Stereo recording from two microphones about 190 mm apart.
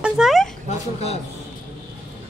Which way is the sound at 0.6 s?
35° left (ahead or behind).